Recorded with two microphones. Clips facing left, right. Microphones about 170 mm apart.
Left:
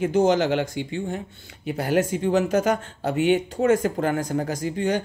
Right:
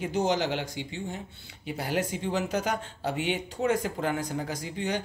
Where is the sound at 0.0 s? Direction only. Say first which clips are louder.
Left 7 dB; 50° left (ahead or behind).